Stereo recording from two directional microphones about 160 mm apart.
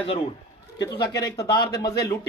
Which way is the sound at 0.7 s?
30° left (ahead or behind).